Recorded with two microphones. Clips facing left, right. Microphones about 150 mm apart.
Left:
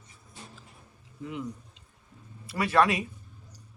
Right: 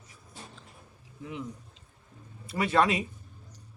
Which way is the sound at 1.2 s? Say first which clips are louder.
Left 2 dB; 20° right (ahead or behind).